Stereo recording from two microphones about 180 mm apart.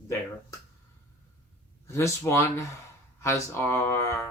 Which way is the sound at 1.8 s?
15° left (ahead or behind).